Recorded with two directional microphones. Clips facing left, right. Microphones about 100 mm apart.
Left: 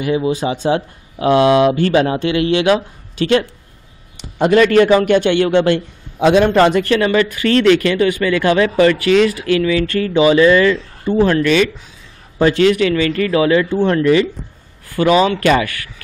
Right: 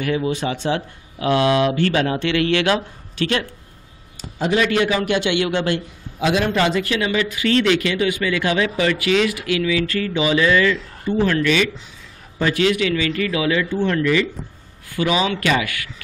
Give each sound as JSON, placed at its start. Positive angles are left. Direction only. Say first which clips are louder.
{"t": 0.0, "sound": "speech", "louder": "left 4 dB", "side_deg": 20}
{"t": 0.3, "sound": "speech", "louder": "left 5 dB", "side_deg": 35}
{"t": 3.2, "sound": "speech", "louder": "left 7 dB", "side_deg": 40}
{"t": 4.2, "sound": "speech", "louder": "left 8 dB", "side_deg": 60}
{"t": 5.5, "sound": "speech", "louder": "left 8 dB", "side_deg": 25}
{"t": 6.4, "sound": "speech", "louder": "left 7 dB", "side_deg": 50}